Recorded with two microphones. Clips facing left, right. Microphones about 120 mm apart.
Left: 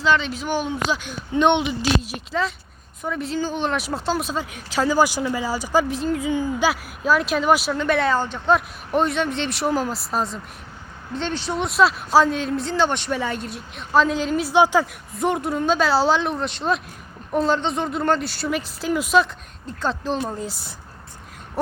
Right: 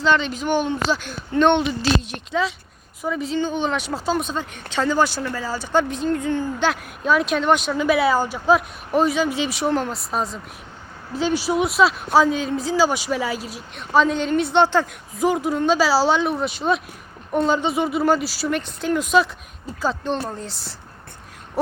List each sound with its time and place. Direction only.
0.0 s speech: centre (ahead or behind)
2.0 s speech: 5° left (ahead or behind)
7.8 s speech: 5° right (ahead or behind)